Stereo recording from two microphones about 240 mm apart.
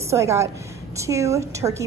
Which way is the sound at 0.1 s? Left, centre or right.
Centre.